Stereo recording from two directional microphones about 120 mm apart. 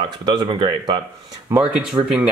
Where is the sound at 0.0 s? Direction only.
40° right (ahead or behind).